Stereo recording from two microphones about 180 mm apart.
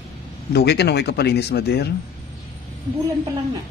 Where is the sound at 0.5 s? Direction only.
65° left (ahead or behind).